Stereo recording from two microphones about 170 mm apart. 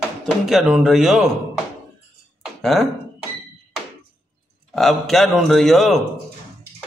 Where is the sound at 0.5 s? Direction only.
Centre (ahead or behind).